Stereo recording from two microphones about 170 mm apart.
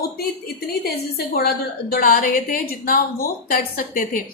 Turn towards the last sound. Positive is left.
turn(degrees=55)  # may be behind; listen again after turning